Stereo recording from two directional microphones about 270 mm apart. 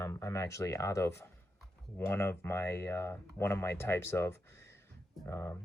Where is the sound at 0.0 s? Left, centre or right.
Centre.